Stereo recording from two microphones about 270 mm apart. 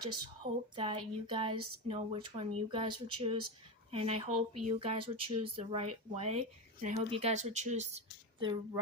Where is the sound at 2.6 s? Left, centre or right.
Centre.